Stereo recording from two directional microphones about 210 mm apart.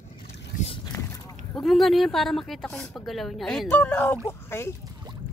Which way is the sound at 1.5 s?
Centre (ahead or behind).